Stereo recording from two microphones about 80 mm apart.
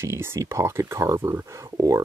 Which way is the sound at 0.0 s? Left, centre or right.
Right.